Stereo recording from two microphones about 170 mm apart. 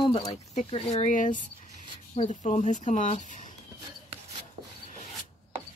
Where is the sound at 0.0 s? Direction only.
30° left (ahead or behind); by 3.5 s 45° left (ahead or behind).